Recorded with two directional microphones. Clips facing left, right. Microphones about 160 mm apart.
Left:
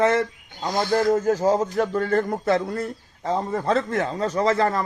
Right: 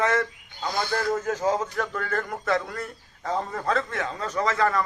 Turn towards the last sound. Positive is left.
turn(degrees=35)  # may be behind; listen again after turning